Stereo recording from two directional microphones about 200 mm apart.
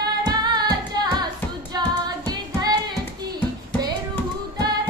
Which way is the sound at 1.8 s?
20° right (ahead or behind).